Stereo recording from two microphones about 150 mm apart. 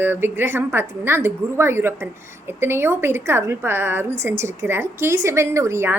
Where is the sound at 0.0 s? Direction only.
15° right (ahead or behind).